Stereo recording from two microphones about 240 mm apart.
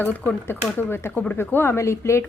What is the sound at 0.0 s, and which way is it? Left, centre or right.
Speech, centre.